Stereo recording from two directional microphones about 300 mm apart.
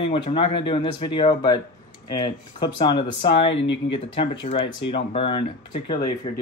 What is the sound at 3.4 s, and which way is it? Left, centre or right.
Speech, left.